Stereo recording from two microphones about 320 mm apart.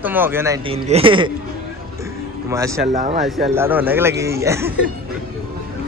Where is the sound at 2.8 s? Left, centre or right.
Right.